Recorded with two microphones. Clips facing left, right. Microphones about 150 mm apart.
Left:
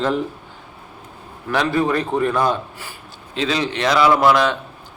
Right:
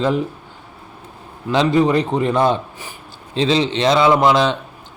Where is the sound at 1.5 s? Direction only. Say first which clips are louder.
Right 4 dB; 20° right (ahead or behind).